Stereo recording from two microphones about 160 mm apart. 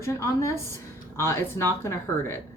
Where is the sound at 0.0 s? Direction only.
15° left (ahead or behind).